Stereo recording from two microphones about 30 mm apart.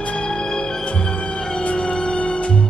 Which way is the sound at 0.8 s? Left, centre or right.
Left.